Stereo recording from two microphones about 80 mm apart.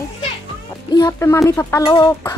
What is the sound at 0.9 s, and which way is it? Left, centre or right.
Speech, left.